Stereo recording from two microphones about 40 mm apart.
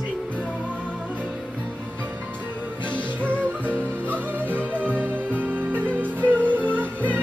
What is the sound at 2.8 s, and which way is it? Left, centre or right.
Music, right.